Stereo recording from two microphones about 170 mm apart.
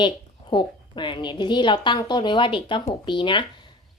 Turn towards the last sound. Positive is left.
turn(degrees=30)  # may be behind; listen again after turning